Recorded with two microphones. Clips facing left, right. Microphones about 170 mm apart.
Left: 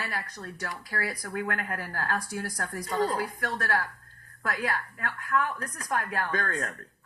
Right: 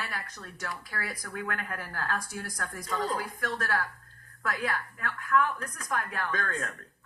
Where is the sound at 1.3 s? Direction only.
20° left (ahead or behind).